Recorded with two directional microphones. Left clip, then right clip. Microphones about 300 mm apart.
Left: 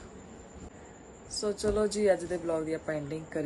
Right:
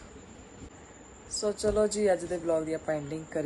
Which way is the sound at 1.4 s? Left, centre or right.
Centre.